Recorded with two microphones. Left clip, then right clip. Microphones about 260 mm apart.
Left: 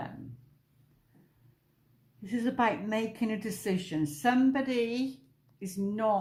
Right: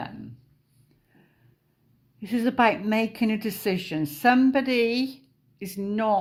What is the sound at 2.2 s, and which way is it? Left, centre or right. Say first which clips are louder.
A woman's voice: right 7 dB; right.